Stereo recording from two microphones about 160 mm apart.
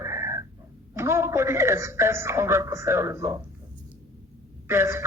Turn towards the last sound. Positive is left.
turn(degrees=-15)  # may be behind; listen again after turning